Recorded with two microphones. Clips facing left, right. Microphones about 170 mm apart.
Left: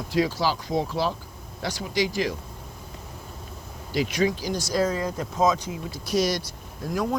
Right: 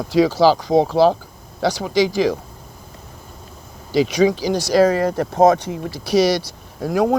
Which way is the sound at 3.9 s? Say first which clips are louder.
Right 8 dB; 90° right.